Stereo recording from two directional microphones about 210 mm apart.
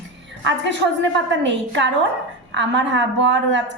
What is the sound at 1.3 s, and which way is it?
A woman's voice, 60° right (ahead or behind).